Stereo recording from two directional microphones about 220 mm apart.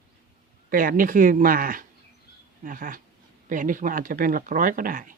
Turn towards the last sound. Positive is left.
turn(degrees=-40)  # may be behind; listen again after turning